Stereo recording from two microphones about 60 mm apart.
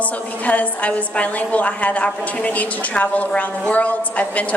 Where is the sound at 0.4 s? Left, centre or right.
Left.